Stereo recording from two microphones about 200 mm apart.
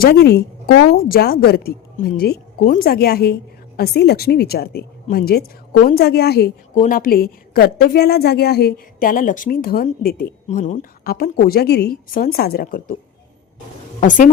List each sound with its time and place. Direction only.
0.0 s a woman's voice: 50° left (ahead or behind)
14.0 s a woman's voice: 40° left (ahead or behind)